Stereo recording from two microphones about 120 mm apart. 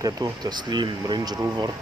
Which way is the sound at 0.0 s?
35° right (ahead or behind).